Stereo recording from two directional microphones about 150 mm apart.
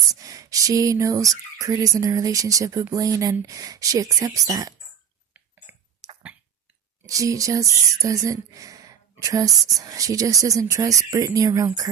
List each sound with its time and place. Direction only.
0.1 s speech: 25° right (ahead or behind)
7.1 s a woman's voice: 20° right (ahead or behind)